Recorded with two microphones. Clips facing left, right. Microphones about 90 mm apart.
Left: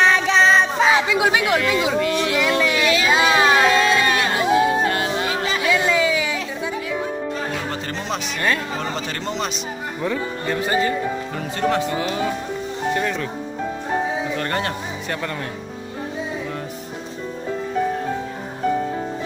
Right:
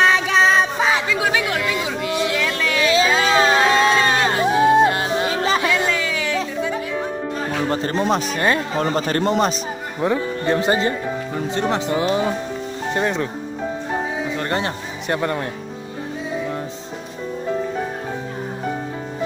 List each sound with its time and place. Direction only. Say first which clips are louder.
0.0 s music: even; 5° right (ahead or behind)
1.0 s speech: left 2 dB; 15° left (ahead or behind)
1.6 s speech: left 4 dB; 20° right (ahead or behind)
2.4 s a sound: left 1 dB; 20° left (ahead or behind)
3.5 s music: right 1 dB; 25° right (ahead or behind)
5.7 s a sound: left 2 dB; 5° left (ahead or behind)
7.7 s speech: right 7 dB; 35° right (ahead or behind)
8.4 s speech: right 3 dB; 25° right (ahead or behind)
8.7 s speech: right 6 dB; 45° right (ahead or behind)
9.9 s speech: right 5 dB; 20° right (ahead or behind)
14.3 s speech: right 1 dB; 20° right (ahead or behind)